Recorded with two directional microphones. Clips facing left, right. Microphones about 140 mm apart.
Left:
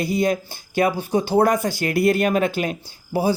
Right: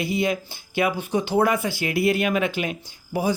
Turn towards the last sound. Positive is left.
turn(degrees=35)  # may be behind; listen again after turning